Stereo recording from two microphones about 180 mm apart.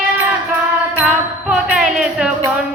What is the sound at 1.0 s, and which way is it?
Music, 5° right (ahead or behind).